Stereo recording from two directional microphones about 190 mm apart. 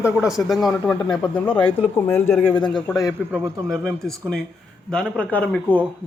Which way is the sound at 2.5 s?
25° left (ahead or behind).